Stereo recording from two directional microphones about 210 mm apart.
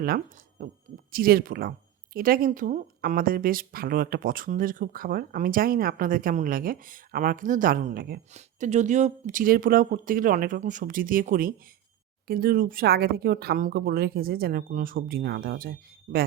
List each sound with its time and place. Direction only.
0.6 s speech: 40° right (ahead or behind)